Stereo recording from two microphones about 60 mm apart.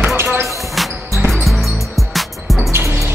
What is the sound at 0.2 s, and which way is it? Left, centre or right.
Basketball bounce, right.